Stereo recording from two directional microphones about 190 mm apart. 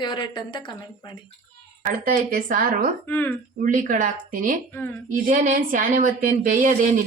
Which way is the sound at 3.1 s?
10° left (ahead or behind).